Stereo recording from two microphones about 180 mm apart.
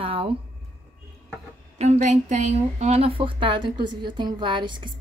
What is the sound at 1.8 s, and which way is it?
A woman's voice, 40° right (ahead or behind).